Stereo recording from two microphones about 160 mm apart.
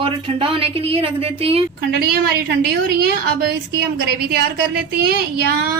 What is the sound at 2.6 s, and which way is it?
A woman's voice, 80° right.